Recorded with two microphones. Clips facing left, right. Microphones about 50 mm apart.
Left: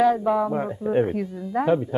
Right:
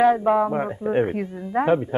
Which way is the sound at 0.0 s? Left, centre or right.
Right.